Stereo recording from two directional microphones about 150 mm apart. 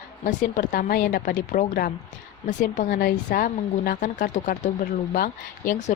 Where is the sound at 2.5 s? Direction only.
55° left (ahead or behind).